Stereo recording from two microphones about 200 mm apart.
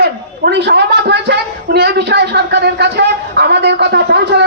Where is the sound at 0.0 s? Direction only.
60° right (ahead or behind).